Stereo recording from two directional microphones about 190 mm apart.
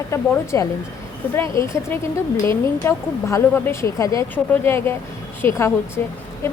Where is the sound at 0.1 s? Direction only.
15° left (ahead or behind).